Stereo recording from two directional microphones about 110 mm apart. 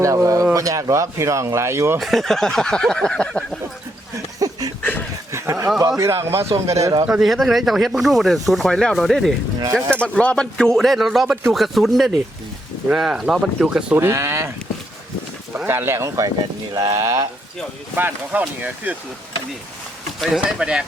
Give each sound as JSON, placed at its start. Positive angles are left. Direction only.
{"t": 0.0, "sound": "speech", "side_deg": -30}
{"t": 2.0, "sound": "speech", "side_deg": 0}
{"t": 4.4, "sound": "a sound", "side_deg": -35}
{"t": 4.8, "sound": "a sound", "side_deg": 15}
{"t": 5.3, "sound": "a sound", "side_deg": -25}
{"t": 6.0, "sound": "speech", "side_deg": -25}
{"t": 7.1, "sound": "speech", "side_deg": 0}
{"t": 13.9, "sound": "speech", "side_deg": -25}
{"t": 15.5, "sound": "speech", "side_deg": -20}
{"t": 17.9, "sound": "speech", "side_deg": -15}
{"t": 20.1, "sound": "speech", "side_deg": 0}